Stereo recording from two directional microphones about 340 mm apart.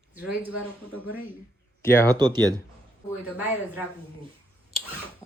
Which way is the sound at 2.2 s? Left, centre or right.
Centre.